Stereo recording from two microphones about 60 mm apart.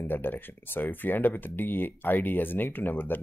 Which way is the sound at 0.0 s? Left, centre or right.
Left.